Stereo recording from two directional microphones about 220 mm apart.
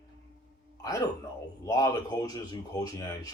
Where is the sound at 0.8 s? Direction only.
15° left (ahead or behind).